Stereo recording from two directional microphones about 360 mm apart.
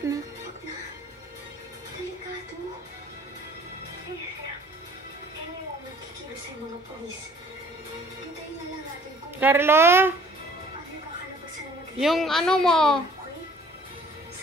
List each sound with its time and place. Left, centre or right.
9.4 s a woman's voice: centre
12.0 s a woman's voice: centre